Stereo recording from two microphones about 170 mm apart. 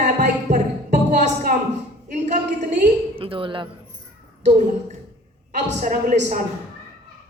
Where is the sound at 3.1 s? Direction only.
30° right (ahead or behind).